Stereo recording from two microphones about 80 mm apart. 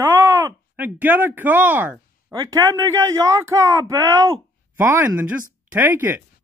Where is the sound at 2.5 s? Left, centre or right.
Right.